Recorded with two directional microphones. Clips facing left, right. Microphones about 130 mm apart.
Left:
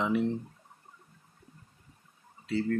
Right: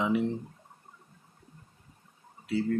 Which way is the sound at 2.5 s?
10° right (ahead or behind).